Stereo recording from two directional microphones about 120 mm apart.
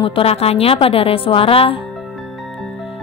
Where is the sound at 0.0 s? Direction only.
50° left (ahead or behind).